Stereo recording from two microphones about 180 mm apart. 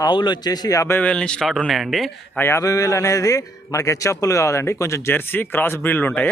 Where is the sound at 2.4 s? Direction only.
15° left (ahead or behind).